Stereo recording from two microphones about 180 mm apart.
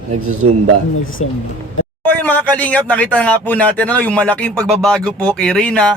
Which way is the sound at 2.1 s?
10° left (ahead or behind).